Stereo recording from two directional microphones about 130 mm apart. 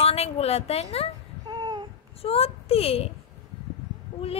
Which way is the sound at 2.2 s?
50° left (ahead or behind).